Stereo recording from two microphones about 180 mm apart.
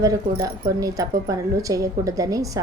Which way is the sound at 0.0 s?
20° right (ahead or behind).